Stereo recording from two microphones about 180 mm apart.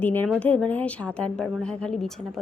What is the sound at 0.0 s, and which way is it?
A child's voice, 10° left (ahead or behind).